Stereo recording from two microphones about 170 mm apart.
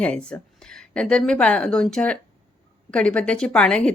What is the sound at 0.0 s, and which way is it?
Speech, 5° left (ahead or behind).